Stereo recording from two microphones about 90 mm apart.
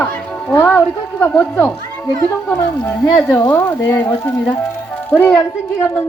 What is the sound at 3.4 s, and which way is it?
Speech, 30° left (ahead or behind).